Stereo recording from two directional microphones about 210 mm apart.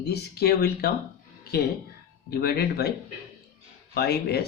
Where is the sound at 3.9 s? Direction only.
50° left (ahead or behind).